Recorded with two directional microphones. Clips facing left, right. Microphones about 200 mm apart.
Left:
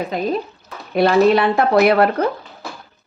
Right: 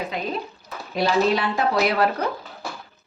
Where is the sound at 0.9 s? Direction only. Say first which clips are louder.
Left 7 dB; 55° left (ahead or behind).